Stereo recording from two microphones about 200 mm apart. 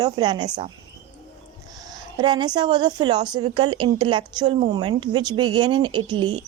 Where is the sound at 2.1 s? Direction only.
20° right (ahead or behind).